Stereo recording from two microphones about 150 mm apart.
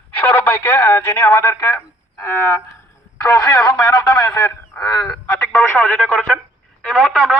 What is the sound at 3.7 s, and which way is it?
Speech, 25° left (ahead or behind).